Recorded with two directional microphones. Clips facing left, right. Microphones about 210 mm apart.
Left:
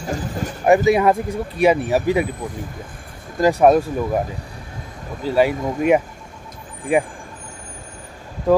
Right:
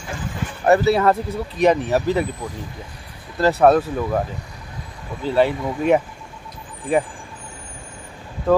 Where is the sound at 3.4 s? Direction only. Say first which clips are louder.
Left 1 dB; 10° left (ahead or behind).